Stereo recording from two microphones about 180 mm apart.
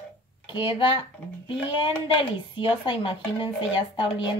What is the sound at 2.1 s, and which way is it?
Speech, 30° left (ahead or behind).